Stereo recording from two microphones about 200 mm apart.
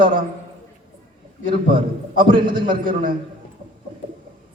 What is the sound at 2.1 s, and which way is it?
Speech, 25° right (ahead or behind).